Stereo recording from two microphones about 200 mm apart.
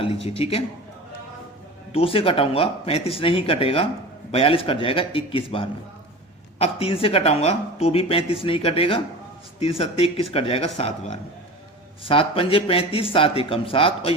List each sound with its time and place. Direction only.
0.3 s speech: 30° left (ahead or behind)
1.9 s speech: 30° left (ahead or behind)